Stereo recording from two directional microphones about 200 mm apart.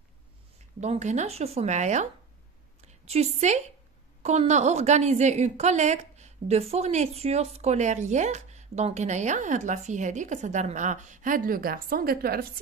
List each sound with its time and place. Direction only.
0.7 s a woman's voice: 35° right (ahead or behind)
3.1 s a woman's voice: 35° right (ahead or behind); by 12.5 s 50° right (ahead or behind)